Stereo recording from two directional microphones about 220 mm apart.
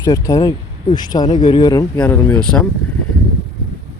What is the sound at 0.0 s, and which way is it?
Speech, 15° left (ahead or behind).